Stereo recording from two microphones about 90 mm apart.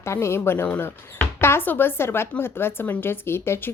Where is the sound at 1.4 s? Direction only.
25° left (ahead or behind).